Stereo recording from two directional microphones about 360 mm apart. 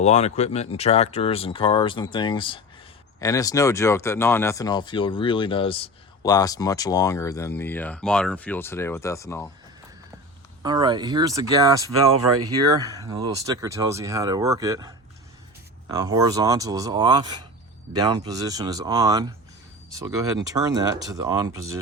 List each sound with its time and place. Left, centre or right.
0.0 s speech: centre
10.6 s speech: centre